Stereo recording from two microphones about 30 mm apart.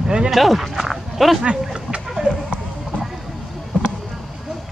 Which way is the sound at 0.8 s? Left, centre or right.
Centre.